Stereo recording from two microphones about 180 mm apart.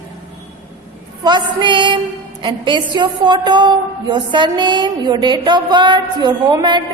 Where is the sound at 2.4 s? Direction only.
25° right (ahead or behind).